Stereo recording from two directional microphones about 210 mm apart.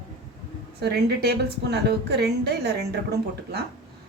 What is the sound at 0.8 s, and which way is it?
A woman's voice, 50° right (ahead or behind).